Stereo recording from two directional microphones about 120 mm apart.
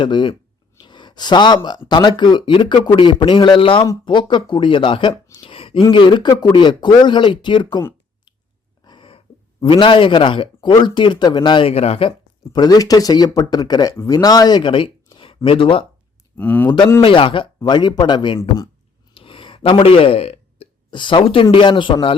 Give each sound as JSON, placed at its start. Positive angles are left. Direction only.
{"t": 0.0, "sound": "speech", "side_deg": 40}
{"t": 0.8, "sound": "a sound", "side_deg": 40}
{"t": 1.6, "sound": "speech", "side_deg": 35}
{"t": 8.8, "sound": "dog", "side_deg": 40}
{"t": 9.6, "sound": "speech", "side_deg": 45}
{"t": 11.7, "sound": "speech", "side_deg": 55}
{"t": 12.5, "sound": "speech", "side_deg": 35}
{"t": 16.4, "sound": "speech", "side_deg": 10}
{"t": 16.6, "sound": "speech", "side_deg": 40}
{"t": 19.1, "sound": "a sound", "side_deg": 45}
{"t": 20.9, "sound": "speech", "side_deg": 40}